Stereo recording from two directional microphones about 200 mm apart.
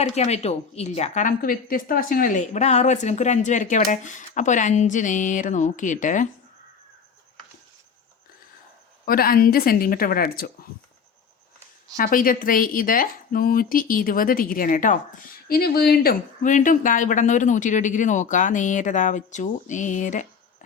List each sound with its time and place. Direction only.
0.0 s a woman's voice: 35° left (ahead or behind)
9.0 s speech: 45° left (ahead or behind)
11.9 s a woman's voice: 45° left (ahead or behind)